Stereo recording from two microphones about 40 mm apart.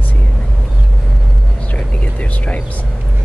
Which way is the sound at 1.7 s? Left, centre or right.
Left.